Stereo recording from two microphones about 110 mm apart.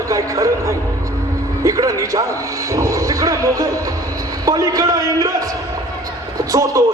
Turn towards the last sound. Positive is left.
turn(degrees=-30)  # may be behind; listen again after turning